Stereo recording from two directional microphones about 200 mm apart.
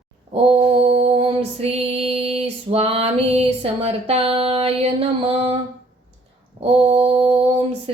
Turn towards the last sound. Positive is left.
turn(degrees=-30)  # may be behind; listen again after turning